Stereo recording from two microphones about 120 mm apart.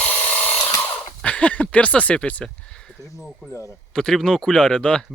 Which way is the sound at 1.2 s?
10° left (ahead or behind).